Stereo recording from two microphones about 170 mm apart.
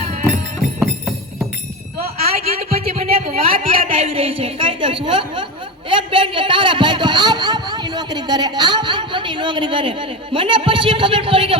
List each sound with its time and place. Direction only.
0.0 s music: 35° right (ahead or behind)
2.0 s a sound: 35° right (ahead or behind)
5.9 s speech: 30° right (ahead or behind)